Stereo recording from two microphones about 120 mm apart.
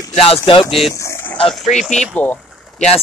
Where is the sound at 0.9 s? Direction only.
25° left (ahead or behind).